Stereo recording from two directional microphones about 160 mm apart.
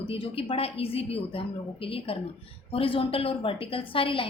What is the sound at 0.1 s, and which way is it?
A woman's voice, 35° left (ahead or behind).